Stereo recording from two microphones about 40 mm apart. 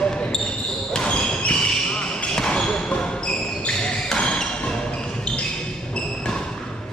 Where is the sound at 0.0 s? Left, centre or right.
Left.